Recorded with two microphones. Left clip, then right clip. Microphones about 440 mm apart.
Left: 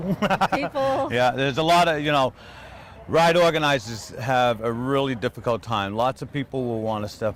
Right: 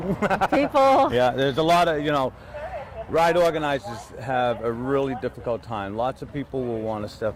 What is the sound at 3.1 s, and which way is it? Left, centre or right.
A man's voice, left.